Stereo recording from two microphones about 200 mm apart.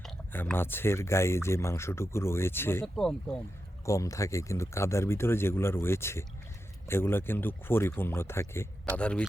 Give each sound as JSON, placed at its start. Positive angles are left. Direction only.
{"t": 0.0, "sound": "speech", "side_deg": 5}
{"t": 3.8, "sound": "speech", "side_deg": 15}